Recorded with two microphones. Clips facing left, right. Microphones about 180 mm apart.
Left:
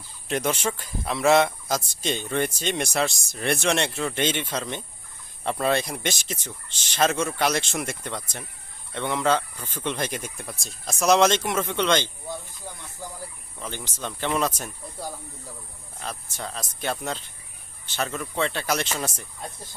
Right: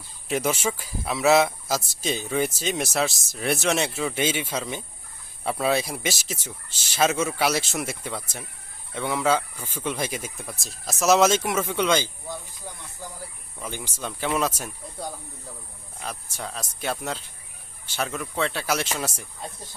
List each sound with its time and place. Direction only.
0.3 s speech: 5° right (ahead or behind)
13.6 s speech: 10° right (ahead or behind)